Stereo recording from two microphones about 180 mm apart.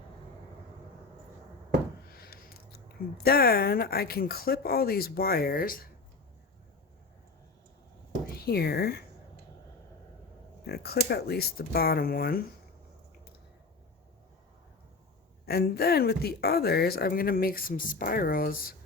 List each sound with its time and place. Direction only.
2.0 s a sound: 55° left (ahead or behind)
3.2 s speech: 60° left (ahead or behind)
8.4 s speech: 60° left (ahead or behind)
10.7 s speech: 60° left (ahead or behind)
15.4 s speech: 60° left (ahead or behind)